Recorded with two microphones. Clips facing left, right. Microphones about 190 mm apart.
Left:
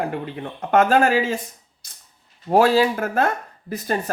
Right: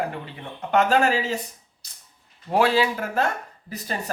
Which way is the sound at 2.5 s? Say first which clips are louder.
Left 4 dB; 45° left (ahead or behind).